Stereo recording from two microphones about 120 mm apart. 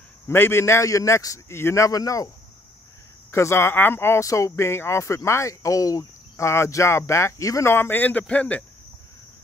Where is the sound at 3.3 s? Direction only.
20° left (ahead or behind).